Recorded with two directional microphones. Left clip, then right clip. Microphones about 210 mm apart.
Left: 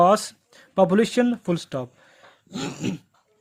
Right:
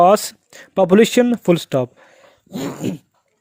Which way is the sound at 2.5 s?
20° right (ahead or behind).